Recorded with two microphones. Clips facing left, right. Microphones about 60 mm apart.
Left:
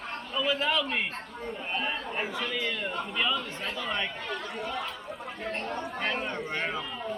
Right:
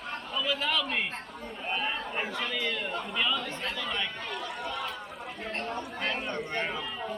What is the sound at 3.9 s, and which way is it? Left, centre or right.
Speech, centre.